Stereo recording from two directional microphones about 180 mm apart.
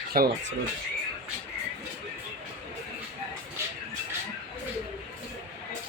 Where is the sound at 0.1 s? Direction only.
55° right (ahead or behind).